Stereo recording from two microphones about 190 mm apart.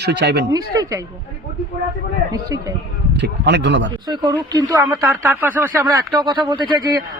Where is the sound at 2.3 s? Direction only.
20° right (ahead or behind).